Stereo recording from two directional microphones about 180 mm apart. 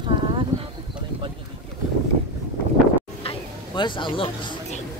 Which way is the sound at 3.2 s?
25° left (ahead or behind).